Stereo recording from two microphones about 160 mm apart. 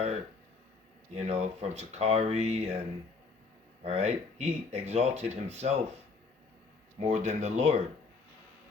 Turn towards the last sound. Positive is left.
turn(degrees=-45)  # may be behind; listen again after turning